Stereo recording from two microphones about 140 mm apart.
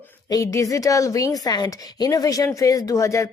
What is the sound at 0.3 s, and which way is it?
A woman's voice, 25° left (ahead or behind).